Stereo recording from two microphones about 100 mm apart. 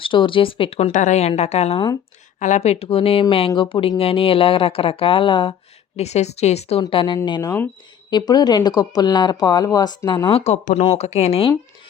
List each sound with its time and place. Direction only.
0.0 s speech: 60° left (ahead or behind)
6.0 s speech: 90° left
6.9 s speech: 55° left (ahead or behind); by 10.0 s 40° left (ahead or behind)
10.2 s speech: 80° left